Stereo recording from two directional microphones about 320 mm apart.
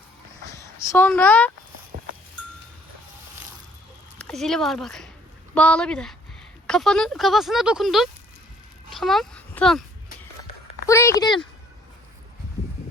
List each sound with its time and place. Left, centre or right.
0.5 s a sound: centre
1.9 s cowbell: right
4.2 s speech: centre
10.8 s speech: centre